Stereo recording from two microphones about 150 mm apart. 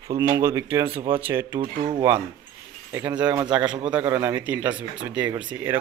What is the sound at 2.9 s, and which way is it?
A man's voice, 10° right (ahead or behind).